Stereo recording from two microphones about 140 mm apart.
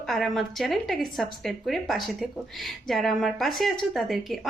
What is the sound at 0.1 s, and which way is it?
A woman's voice, centre (ahead or behind).